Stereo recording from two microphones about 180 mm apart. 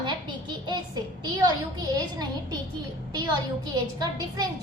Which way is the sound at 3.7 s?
25° right (ahead or behind).